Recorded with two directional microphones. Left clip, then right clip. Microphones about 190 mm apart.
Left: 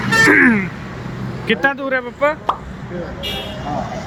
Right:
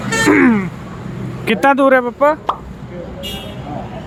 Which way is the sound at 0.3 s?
10° right (ahead or behind).